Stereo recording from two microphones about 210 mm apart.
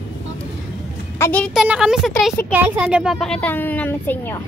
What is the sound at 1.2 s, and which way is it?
A child's voice, 5° left (ahead or behind).